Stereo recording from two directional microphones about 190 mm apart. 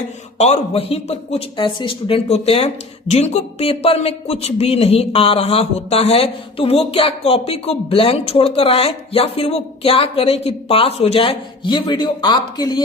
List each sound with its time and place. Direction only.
0.3 s speech: 35° left (ahead or behind)